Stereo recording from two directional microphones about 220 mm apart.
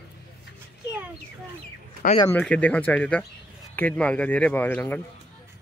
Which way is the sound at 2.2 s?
5° left (ahead or behind).